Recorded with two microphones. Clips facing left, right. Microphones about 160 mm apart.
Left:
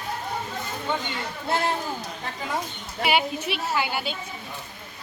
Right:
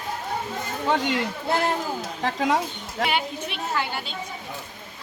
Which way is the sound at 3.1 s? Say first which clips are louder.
Left 8 dB; 5° left (ahead or behind).